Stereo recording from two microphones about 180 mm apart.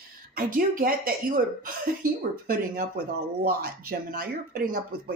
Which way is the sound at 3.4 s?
55° right (ahead or behind).